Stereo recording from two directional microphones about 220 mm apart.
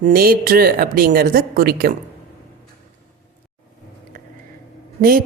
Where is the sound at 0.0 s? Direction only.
40° right (ahead or behind).